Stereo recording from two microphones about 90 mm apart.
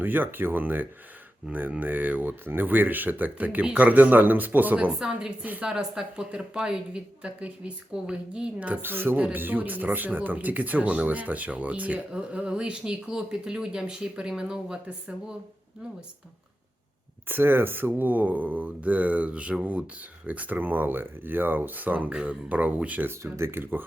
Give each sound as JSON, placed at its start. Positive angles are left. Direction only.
{"t": 0.0, "sound": "speech", "side_deg": -20}
{"t": 17.2, "sound": "speech", "side_deg": -25}